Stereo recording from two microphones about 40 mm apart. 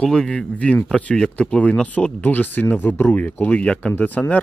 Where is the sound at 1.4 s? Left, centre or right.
Left.